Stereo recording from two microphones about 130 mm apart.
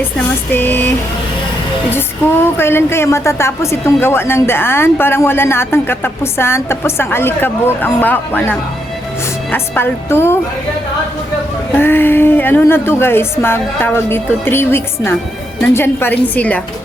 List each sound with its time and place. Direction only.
0.5 s a woman's voice: 15° left (ahead or behind)
1.9 s a woman's voice: 15° left (ahead or behind)
11.8 s a woman's voice: 15° left (ahead or behind)